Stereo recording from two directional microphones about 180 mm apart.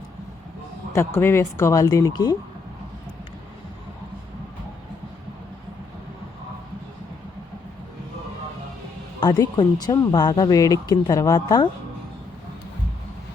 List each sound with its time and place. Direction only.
0.9 s speech: 15° left (ahead or behind)
9.2 s speech: 25° left (ahead or behind)